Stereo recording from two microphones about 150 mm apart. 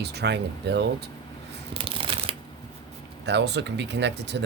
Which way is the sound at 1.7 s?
35° right (ahead or behind).